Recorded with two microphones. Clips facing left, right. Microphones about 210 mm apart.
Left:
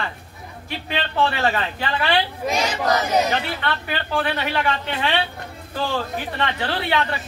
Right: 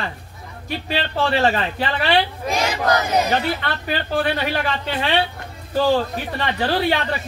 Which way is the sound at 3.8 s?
40° right (ahead or behind).